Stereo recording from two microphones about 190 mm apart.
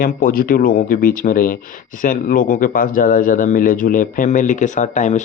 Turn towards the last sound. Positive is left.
turn(degrees=40)  # may be behind; listen again after turning